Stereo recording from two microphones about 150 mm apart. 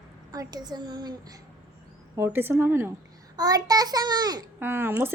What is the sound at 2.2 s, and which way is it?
A woman's voice, 15° right (ahead or behind).